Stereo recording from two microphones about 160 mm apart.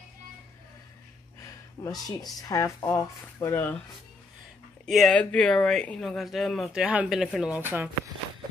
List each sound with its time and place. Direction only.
1.4 s a sound: 20° left (ahead or behind)
2.3 s speech: 20° left (ahead or behind)
4.8 s speech: centre (ahead or behind)